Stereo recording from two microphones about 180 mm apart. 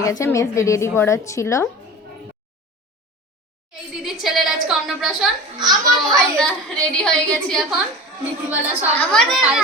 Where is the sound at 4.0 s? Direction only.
Centre (ahead or behind).